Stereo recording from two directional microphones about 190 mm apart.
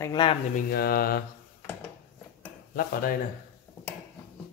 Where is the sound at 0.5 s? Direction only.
55° left (ahead or behind).